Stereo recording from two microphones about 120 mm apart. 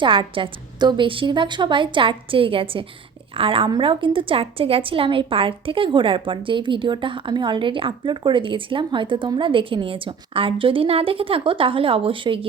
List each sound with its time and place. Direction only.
0.0 s a woman's voice: 45° right (ahead or behind)